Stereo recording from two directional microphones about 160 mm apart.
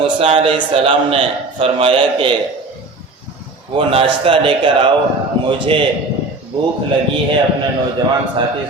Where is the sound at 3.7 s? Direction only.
35° right (ahead or behind).